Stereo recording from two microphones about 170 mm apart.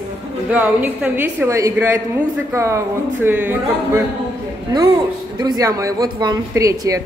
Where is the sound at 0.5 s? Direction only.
10° right (ahead or behind).